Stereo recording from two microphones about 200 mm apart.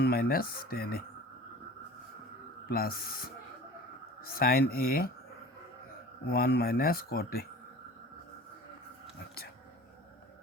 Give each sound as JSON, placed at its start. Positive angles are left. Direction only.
{"t": 0.0, "sound": "speech", "side_deg": 50}
{"t": 2.6, "sound": "speech", "side_deg": 50}
{"t": 4.4, "sound": "speech", "side_deg": 50}
{"t": 6.3, "sound": "speech", "side_deg": 50}